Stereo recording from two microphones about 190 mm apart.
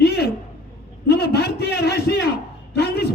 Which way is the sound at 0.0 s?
60° left (ahead or behind).